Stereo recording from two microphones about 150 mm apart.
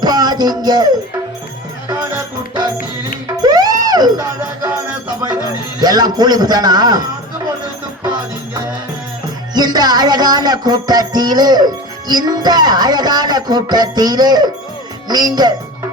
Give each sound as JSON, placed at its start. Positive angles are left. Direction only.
{"t": 0.0, "sound": "music", "side_deg": -25}
{"t": 1.9, "sound": "music", "side_deg": -25}
{"t": 5.2, "sound": "speech", "side_deg": -25}
{"t": 9.6, "sound": "music", "side_deg": -25}